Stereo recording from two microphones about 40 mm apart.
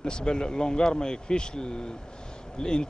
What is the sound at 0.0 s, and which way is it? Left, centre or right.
Speech, centre.